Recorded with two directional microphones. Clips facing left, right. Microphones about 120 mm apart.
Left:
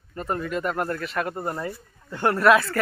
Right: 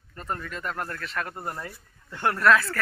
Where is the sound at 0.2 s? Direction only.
10° left (ahead or behind).